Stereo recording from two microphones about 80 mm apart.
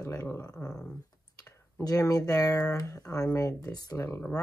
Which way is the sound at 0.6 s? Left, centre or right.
Left.